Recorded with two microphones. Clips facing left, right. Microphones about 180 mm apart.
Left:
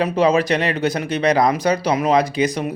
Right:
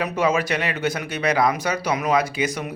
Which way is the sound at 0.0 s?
35° left (ahead or behind).